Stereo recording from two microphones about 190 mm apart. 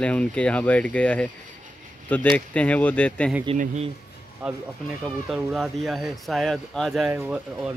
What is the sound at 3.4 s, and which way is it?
Speech, 40° right (ahead or behind).